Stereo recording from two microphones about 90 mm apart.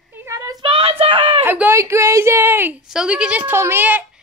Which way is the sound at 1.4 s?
20° right (ahead or behind).